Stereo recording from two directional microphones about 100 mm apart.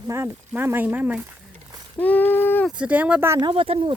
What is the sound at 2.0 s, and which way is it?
Speech, 15° left (ahead or behind).